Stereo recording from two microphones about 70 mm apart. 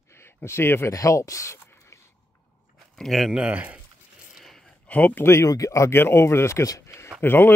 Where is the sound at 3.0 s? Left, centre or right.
Centre.